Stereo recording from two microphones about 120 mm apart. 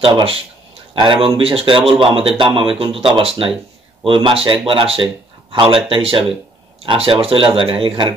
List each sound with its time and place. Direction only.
0.1 s speech: 45° right (ahead or behind)